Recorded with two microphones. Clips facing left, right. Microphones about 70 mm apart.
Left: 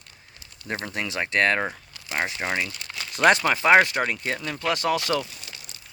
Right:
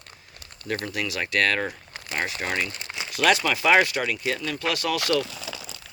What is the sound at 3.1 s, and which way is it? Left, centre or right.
Speech, left.